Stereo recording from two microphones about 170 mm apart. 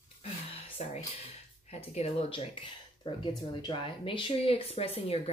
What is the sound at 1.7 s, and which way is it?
Speech, 40° left (ahead or behind).